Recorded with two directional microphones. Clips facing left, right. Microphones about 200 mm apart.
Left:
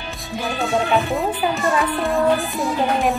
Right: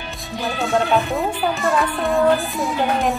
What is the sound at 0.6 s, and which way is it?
Speech, centre (ahead or behind).